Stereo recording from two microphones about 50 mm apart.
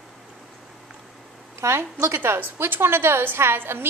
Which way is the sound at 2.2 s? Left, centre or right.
Right.